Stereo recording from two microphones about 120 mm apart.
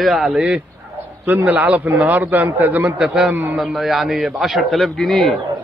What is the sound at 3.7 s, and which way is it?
A man's voice, centre (ahead or behind).